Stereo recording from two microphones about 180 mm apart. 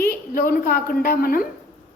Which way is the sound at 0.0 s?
50° left (ahead or behind).